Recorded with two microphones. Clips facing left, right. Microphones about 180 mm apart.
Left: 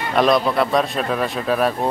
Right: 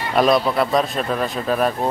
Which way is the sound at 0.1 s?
Centre (ahead or behind).